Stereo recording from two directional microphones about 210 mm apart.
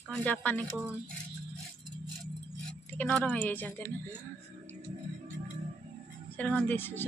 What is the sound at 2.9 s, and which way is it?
A woman's voice, 5° left (ahead or behind).